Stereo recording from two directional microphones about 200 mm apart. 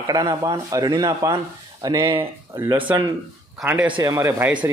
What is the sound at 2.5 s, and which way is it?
A man's voice, 10° right (ahead or behind).